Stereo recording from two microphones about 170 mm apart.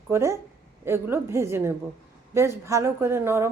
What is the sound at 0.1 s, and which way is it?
Speech, 15° right (ahead or behind).